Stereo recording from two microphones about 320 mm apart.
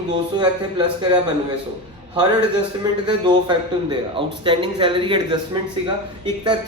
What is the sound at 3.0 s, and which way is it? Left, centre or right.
A man's voice, centre.